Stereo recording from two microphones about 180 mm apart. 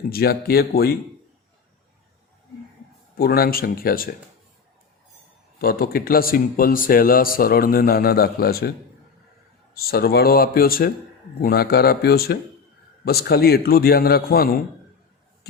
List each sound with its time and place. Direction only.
0.1 s speech: 60° left (ahead or behind)
3.2 s speech: 60° left (ahead or behind)
5.5 s speech: 55° left (ahead or behind)
9.7 s speech: 60° left (ahead or behind)